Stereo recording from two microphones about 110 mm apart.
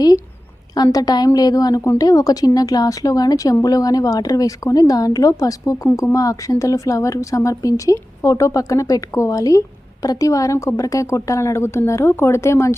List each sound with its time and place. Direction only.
0.7 s a woman's voice: 35° left (ahead or behind)